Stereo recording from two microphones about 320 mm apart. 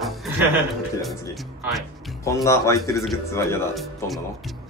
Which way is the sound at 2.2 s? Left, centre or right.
Centre.